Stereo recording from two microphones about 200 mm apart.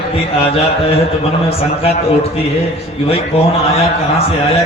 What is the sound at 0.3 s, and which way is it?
A man's voice, 30° left (ahead or behind).